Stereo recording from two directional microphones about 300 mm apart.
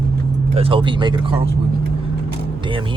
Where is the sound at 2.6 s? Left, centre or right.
Centre.